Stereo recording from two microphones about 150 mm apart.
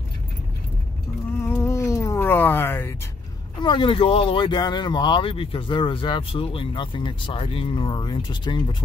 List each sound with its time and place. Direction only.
1.4 s cat: 15° left (ahead or behind)
3.5 s speech: 30° left (ahead or behind)